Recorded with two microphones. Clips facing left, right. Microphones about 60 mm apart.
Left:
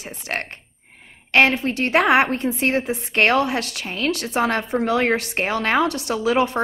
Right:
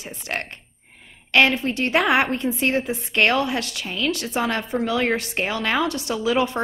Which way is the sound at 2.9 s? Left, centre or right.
Left.